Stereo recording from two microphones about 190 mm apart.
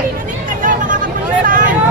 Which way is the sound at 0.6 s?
45° right (ahead or behind).